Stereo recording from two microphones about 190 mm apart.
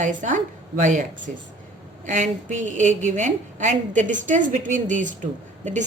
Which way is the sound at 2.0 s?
40° right (ahead or behind).